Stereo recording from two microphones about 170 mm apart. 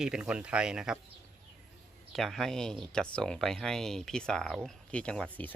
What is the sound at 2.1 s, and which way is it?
Speech, centre (ahead or behind).